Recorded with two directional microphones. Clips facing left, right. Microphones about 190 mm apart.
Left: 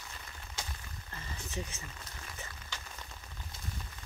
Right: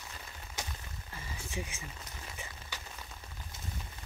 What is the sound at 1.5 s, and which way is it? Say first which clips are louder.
Speech: even; 10° right (ahead or behind).